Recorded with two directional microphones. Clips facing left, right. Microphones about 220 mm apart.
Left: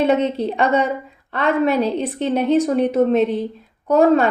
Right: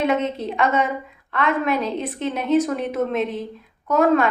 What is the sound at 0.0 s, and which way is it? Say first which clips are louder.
Speech: left 4 dB; 35° left (ahead or behind).